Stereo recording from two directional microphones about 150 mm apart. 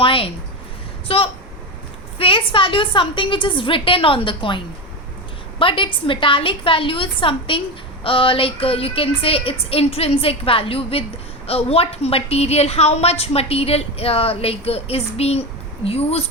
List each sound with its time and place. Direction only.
0.0 s a woman's voice: 35° left (ahead or behind)